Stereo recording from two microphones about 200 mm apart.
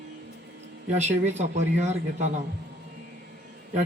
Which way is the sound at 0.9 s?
35° right (ahead or behind).